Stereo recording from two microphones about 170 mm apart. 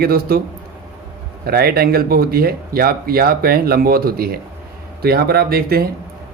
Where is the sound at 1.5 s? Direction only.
65° right (ahead or behind).